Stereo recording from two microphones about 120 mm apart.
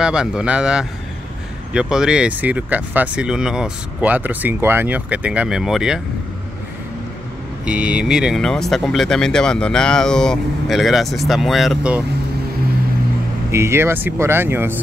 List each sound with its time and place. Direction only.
0.0 s speech: 5° right (ahead or behind)
7.6 s speech: 10° right (ahead or behind)
13.5 s speech: 20° right (ahead or behind)